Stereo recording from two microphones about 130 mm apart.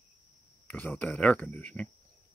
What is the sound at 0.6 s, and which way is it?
Speech, 10° left (ahead or behind).